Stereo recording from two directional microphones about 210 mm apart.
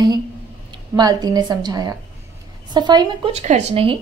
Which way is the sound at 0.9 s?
20° right (ahead or behind).